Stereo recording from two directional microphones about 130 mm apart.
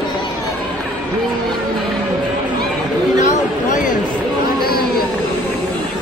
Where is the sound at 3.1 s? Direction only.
70° left (ahead or behind).